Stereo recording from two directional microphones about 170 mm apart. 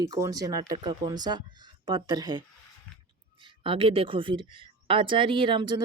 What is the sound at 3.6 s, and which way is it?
A woman's voice, 30° right (ahead or behind).